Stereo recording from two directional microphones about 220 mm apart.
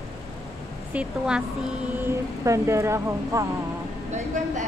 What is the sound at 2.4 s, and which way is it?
Speech, 15° right (ahead or behind).